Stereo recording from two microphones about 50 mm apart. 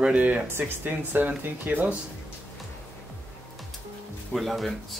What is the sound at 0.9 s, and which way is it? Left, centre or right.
Speech, right.